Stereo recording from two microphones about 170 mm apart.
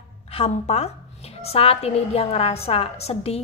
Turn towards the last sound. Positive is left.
turn(degrees=35)  # may be behind; listen again after turning